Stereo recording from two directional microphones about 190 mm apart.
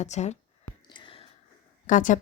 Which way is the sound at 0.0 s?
35° left (ahead or behind).